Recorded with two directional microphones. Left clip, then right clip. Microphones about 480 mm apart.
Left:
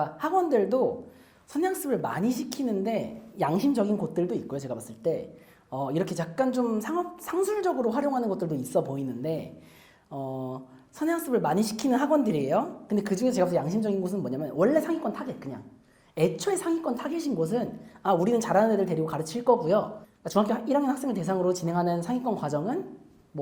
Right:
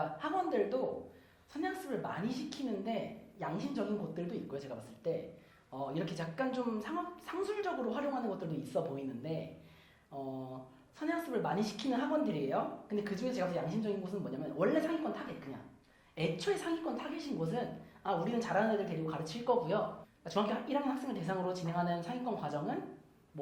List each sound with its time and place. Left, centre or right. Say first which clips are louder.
0.2 s a woman's voice: left 11 dB; left
10.1 s a woman's voice: left 9 dB; left